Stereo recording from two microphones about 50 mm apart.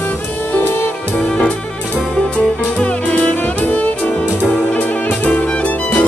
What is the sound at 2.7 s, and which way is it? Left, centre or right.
Music, left.